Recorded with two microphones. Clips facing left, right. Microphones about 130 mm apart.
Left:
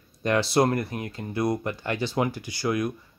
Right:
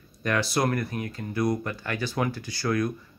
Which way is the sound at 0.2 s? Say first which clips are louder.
Left 4 dB; 25° left (ahead or behind).